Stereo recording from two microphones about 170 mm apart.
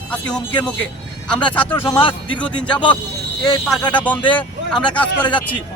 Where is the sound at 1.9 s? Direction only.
30° left (ahead or behind).